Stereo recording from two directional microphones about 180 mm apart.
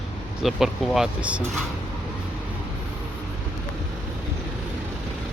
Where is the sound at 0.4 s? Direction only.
Centre (ahead or behind).